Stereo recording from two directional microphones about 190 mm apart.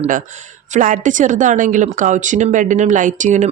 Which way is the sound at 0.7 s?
45° right (ahead or behind).